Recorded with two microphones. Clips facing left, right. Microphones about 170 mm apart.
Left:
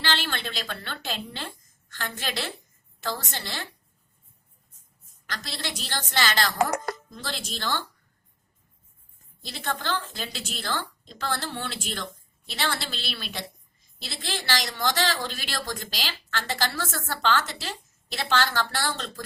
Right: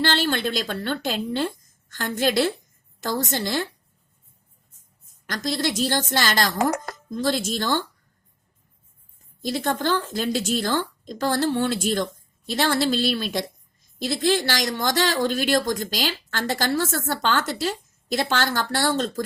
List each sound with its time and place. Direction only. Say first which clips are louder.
0.1 s a woman's voice: right 7 dB; 45° right (ahead or behind)
5.2 s speech: right 10 dB; 45° right (ahead or behind)
9.4 s speech: right 8 dB; 45° right (ahead or behind)